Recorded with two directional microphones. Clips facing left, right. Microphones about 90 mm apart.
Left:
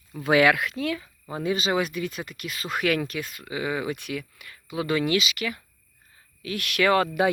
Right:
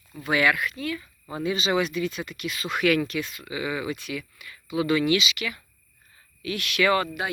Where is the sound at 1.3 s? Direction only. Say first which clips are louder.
Even; 45° left (ahead or behind).